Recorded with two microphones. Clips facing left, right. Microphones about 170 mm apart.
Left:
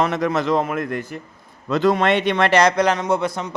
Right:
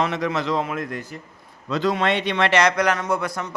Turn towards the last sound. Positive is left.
turn(degrees=25)  # may be behind; listen again after turning